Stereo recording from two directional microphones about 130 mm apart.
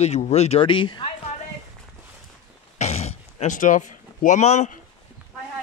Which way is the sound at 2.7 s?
60° left (ahead or behind).